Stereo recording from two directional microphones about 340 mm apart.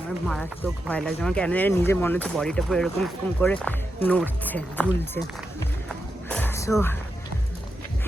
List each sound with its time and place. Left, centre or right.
0.3 s speech: centre
6.2 s music: centre